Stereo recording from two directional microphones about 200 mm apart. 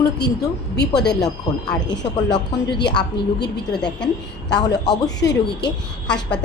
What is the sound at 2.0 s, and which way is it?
Speech, 20° left (ahead or behind).